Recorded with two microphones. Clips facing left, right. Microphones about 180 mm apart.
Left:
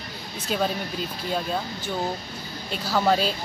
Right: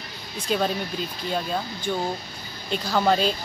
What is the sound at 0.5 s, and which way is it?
Speech, 5° left (ahead or behind).